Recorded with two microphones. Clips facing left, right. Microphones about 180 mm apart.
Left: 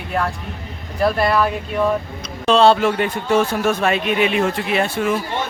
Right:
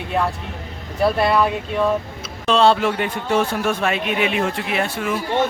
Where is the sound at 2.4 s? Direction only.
35° left (ahead or behind).